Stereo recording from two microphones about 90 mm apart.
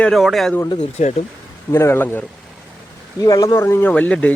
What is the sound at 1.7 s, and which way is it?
Speech, 30° left (ahead or behind).